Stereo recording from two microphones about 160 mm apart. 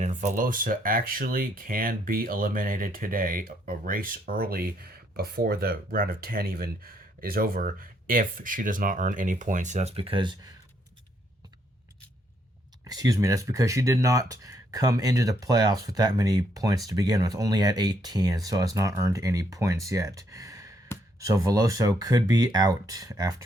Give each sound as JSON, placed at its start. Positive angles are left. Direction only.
{"t": 0.0, "sound": "speech", "side_deg": -50}
{"t": 12.9, "sound": "speech", "side_deg": -20}